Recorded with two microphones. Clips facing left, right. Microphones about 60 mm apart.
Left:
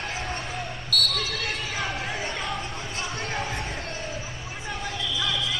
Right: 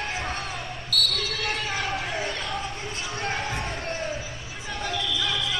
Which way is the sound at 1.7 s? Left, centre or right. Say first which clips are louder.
Right 1 dB; centre.